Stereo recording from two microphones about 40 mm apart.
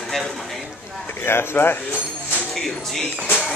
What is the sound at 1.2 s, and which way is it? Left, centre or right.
Speech, left.